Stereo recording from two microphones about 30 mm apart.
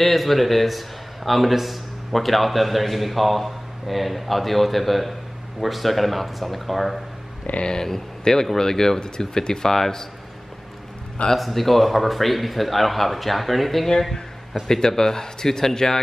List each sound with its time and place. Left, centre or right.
0.0 s speech: centre
7.5 s speech: left
8.2 s speech: centre
11.3 s speech: centre
14.7 s speech: centre